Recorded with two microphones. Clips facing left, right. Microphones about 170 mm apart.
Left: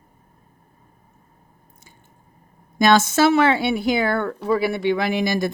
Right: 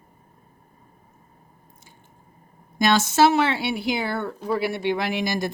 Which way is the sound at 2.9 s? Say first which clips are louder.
Left 1 dB; 50° left (ahead or behind).